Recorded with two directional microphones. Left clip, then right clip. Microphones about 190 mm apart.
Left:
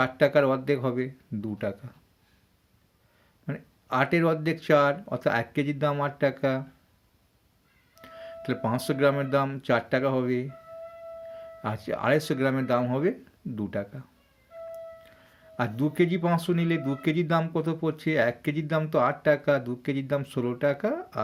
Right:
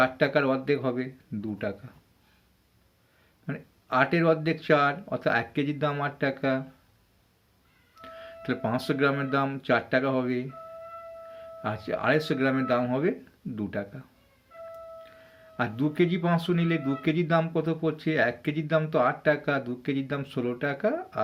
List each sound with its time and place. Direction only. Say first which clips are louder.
0.0 s speech: left 2 dB; 40° left (ahead or behind)
3.4 s speech: even; 40° left (ahead or behind)
7.9 s speech: left 1 dB; 40° left (ahead or behind)
15.5 s speech: even; 40° left (ahead or behind)